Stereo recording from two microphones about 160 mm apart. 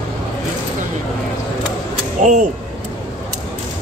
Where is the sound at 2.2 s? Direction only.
50° right (ahead or behind).